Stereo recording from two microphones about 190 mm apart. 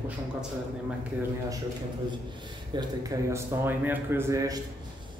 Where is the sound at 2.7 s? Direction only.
20° right (ahead or behind).